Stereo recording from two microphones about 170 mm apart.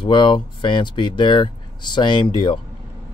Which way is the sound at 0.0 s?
30° left (ahead or behind).